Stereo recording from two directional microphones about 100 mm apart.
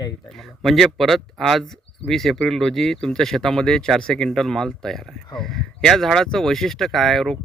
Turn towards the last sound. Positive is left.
turn(degrees=5)  # may be behind; listen again after turning